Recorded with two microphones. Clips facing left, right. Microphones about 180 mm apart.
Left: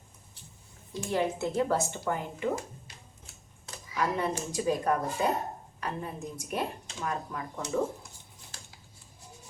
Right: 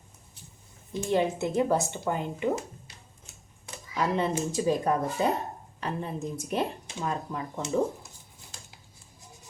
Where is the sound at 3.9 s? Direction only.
25° right (ahead or behind).